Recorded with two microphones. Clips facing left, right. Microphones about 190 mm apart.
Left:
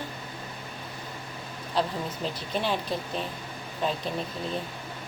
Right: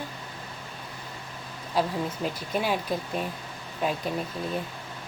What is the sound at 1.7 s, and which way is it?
Speech, 10° right (ahead or behind).